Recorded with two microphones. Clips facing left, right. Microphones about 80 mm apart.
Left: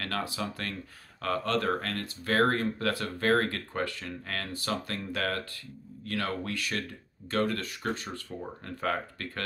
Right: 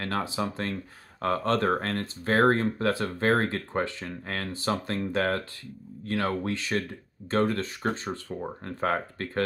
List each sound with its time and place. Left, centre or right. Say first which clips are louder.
0.0 s speech: right 4 dB; right